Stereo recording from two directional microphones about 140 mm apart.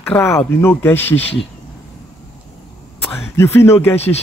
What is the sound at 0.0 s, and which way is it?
Speech, 20° left (ahead or behind).